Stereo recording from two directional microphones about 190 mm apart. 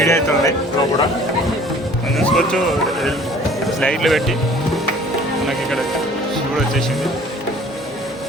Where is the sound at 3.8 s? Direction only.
Centre (ahead or behind).